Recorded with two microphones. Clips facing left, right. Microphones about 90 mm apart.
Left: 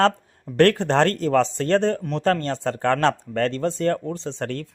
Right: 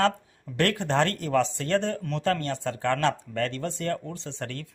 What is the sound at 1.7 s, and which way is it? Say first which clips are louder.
Speech: left 6 dB; 65° left (ahead or behind).